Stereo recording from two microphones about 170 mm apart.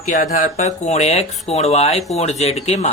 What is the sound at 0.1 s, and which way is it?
Speech, 50° left (ahead or behind).